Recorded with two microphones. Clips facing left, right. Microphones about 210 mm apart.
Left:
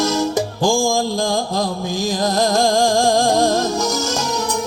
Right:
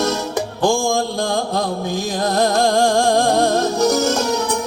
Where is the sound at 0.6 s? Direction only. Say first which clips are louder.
Even; 60° right (ahead or behind).